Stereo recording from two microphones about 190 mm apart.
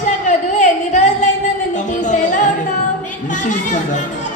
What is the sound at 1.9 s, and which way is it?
Music, 40° left (ahead or behind).